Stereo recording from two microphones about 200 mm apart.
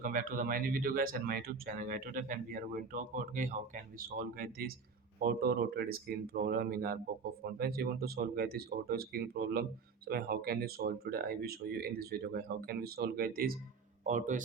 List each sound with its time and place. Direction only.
0.0 s speech: 45° right (ahead or behind)
14.0 s speech: 40° right (ahead or behind)